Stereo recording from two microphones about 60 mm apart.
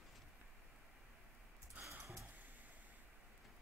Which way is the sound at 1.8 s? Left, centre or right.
Right.